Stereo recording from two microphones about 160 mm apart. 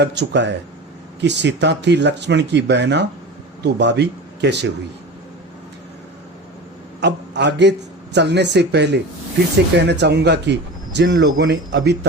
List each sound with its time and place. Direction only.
0.0 s speech: 90° right
7.0 s a man's voice: 90° right